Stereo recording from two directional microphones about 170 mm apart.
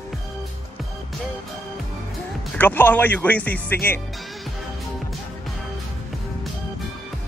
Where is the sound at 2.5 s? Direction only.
10° left (ahead or behind).